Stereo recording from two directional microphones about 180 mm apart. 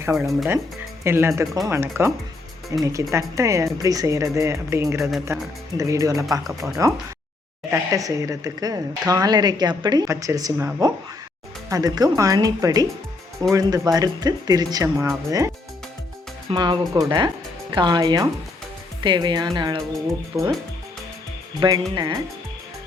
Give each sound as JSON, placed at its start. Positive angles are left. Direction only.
{"t": 0.0, "sound": "speech", "side_deg": -15}
{"t": 0.3, "sound": "speech", "side_deg": 0}
{"t": 1.0, "sound": "speech", "side_deg": -15}
{"t": 6.5, "sound": "speech", "side_deg": 0}
{"t": 7.7, "sound": "speech", "side_deg": -20}
{"t": 16.5, "sound": "speech", "side_deg": -25}
{"t": 20.3, "sound": "speech", "side_deg": -10}
{"t": 21.6, "sound": "speech", "side_deg": -25}